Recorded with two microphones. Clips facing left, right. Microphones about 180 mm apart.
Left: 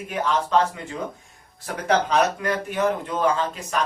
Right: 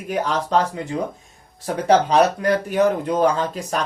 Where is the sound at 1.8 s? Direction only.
35° right (ahead or behind).